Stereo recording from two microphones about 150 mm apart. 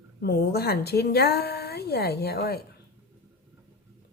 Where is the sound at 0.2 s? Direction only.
90° left.